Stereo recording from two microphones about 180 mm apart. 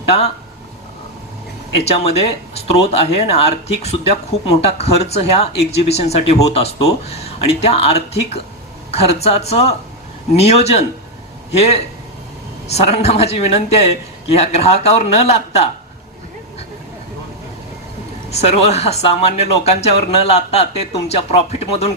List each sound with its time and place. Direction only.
1.8 s speech: 35° left (ahead or behind)
18.3 s speech: 35° left (ahead or behind)